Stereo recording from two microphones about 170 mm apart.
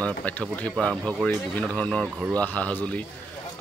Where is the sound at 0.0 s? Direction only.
10° left (ahead or behind).